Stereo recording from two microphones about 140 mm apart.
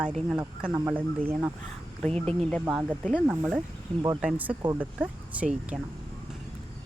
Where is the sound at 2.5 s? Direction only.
5° right (ahead or behind).